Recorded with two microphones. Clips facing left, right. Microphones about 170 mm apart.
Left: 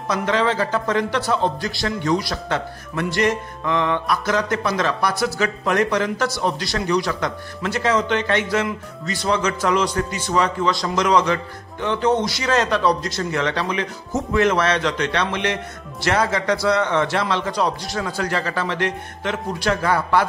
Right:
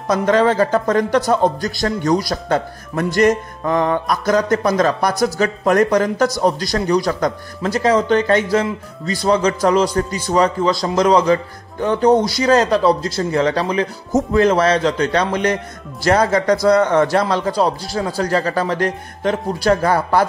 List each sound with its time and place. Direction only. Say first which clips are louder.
0.1 s a man's voice: right 6 dB; 45° right (ahead or behind)